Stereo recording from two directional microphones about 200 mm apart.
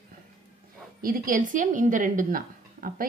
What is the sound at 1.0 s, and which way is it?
Speech, 45° right (ahead or behind).